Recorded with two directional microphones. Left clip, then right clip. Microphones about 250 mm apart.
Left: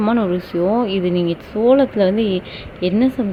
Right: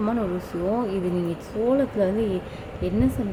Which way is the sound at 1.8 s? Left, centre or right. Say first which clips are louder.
Left 7 dB; centre.